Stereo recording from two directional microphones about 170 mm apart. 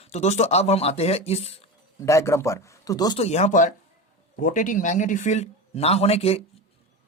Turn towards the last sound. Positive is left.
turn(degrees=35)  # may be behind; listen again after turning